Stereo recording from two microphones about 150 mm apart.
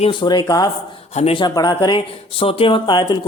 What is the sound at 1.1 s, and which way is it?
Speech, 40° left (ahead or behind).